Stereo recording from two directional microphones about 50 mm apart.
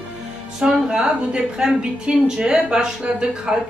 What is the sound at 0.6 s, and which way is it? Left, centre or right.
Speech, centre.